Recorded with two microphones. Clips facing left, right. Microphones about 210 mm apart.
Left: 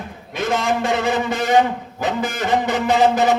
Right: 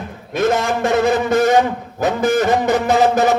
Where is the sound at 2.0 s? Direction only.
45° right (ahead or behind).